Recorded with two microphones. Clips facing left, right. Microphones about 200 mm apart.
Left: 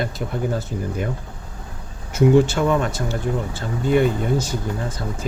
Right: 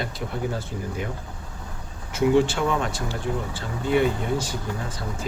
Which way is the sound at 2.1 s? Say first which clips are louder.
Left 4 dB; 45° left (ahead or behind).